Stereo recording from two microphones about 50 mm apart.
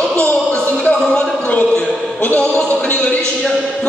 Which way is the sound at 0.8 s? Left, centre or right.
Centre.